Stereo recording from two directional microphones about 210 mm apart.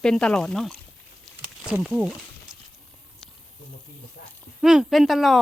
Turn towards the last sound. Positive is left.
turn(degrees=0)  # may be behind; listen again after turning